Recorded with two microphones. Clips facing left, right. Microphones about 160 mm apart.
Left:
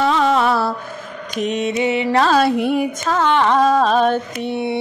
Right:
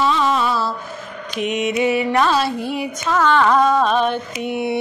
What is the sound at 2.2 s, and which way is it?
Carnatic music, 50° left (ahead or behind).